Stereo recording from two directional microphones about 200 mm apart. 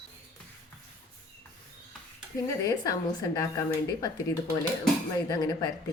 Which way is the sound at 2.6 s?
20° left (ahead or behind).